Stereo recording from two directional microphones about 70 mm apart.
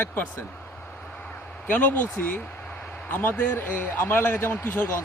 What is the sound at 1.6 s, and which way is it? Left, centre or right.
Speech, left.